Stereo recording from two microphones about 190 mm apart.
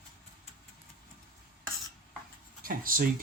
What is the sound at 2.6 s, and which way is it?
Speech, 50° right (ahead or behind).